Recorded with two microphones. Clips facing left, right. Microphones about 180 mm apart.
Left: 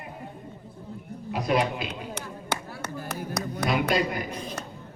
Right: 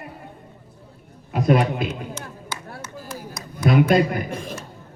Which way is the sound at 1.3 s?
50° right (ahead or behind).